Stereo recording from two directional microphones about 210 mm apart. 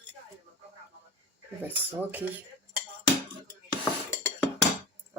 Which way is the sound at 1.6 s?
10° right (ahead or behind).